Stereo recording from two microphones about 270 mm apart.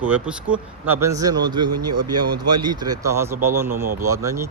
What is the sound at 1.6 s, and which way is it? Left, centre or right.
Speech, right.